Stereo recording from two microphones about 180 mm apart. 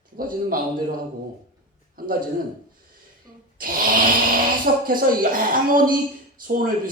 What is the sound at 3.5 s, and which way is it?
Speech, 50° right (ahead or behind).